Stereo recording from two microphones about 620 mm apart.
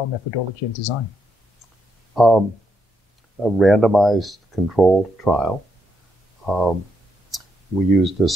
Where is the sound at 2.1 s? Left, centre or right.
Centre.